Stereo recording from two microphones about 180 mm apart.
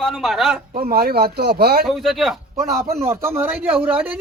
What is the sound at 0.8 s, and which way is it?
Speech, 55° right (ahead or behind).